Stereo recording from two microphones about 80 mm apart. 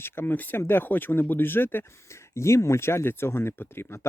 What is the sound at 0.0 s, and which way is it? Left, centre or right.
Speech, left.